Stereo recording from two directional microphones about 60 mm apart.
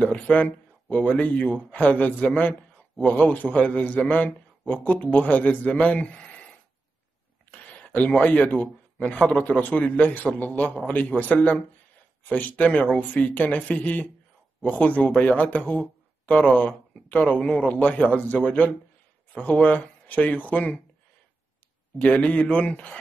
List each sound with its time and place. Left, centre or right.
0.0 s a man's voice: left
7.5 s a man's voice: left
22.0 s a man's voice: left